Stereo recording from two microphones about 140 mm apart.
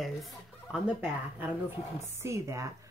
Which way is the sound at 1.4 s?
15° right (ahead or behind).